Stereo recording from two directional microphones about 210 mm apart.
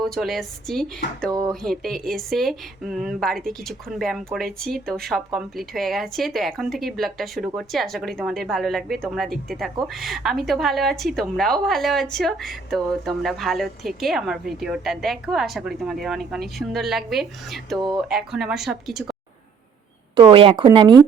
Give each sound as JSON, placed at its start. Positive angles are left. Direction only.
{"t": 0.0, "sound": "a woman's voice", "side_deg": 0}
{"t": 1.3, "sound": "speech", "side_deg": -20}
{"t": 1.6, "sound": "a woman's voice", "side_deg": 0}
{"t": 20.1, "sound": "speech", "side_deg": -25}